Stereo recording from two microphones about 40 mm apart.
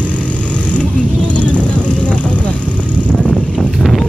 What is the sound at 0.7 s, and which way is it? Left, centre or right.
Vehicle, left.